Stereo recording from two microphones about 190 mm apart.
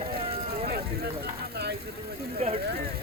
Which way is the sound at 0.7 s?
60° right (ahead or behind).